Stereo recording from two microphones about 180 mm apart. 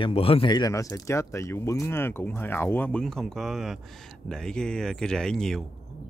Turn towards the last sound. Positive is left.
turn(degrees=5)  # may be behind; listen again after turning